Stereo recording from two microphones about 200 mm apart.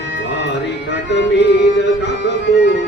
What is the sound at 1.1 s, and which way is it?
Music, 60° left (ahead or behind).